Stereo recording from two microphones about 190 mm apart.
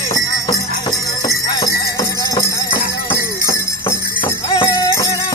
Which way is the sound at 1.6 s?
15° left (ahead or behind).